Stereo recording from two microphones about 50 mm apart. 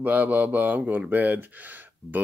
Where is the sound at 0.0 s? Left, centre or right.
Right.